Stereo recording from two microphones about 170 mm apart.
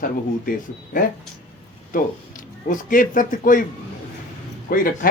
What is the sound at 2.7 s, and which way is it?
Speech, 50° left (ahead or behind).